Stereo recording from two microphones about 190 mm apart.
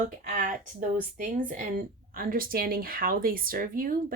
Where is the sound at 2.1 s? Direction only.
50° right (ahead or behind).